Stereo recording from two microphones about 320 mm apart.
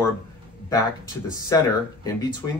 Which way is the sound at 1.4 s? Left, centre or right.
Centre.